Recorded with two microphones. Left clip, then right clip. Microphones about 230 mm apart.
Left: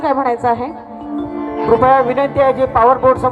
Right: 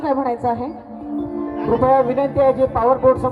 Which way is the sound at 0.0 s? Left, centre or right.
Left.